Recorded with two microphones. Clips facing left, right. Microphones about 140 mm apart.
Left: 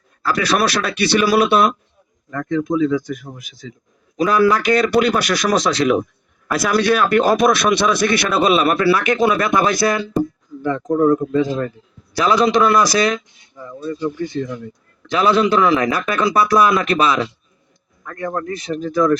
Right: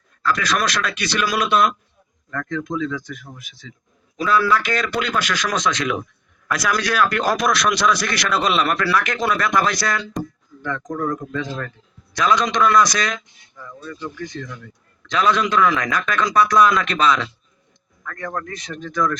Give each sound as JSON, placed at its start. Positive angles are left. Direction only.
{"t": 0.3, "sound": "speech", "side_deg": 35}